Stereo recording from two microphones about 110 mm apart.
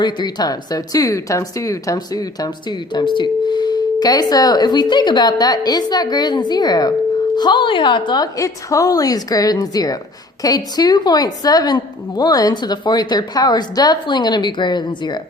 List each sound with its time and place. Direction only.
0.0 s speech: 40° left (ahead or behind)